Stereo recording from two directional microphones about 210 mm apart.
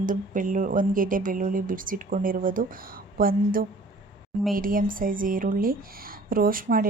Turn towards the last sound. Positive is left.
turn(degrees=-40)  # may be behind; listen again after turning